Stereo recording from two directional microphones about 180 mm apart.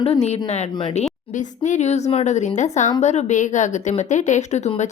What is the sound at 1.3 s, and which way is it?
A woman's voice, 45° left (ahead or behind).